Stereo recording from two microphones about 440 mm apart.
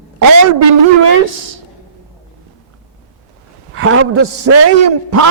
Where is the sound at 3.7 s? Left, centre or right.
Right.